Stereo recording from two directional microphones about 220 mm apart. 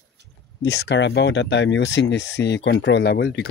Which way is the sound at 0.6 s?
50° left (ahead or behind).